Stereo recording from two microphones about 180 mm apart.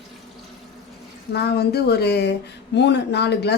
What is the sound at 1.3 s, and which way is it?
Speech, 65° left (ahead or behind).